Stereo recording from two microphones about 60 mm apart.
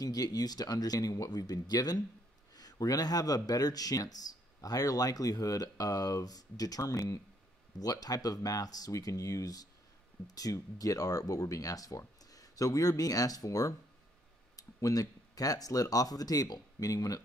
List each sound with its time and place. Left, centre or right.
0.0 s speech: left
7.8 s speech: left